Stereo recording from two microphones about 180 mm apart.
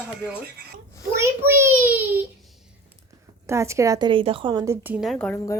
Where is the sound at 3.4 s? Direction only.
15° right (ahead or behind).